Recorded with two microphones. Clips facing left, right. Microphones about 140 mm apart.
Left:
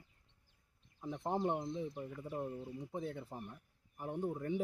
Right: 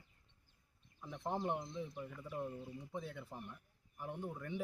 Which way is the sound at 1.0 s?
35° left (ahead or behind).